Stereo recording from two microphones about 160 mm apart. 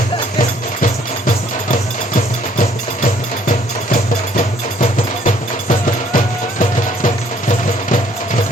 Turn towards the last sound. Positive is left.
turn(degrees=50)  # may be behind; listen again after turning